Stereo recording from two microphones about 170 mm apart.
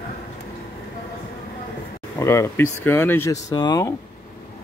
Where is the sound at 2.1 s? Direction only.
15° left (ahead or behind).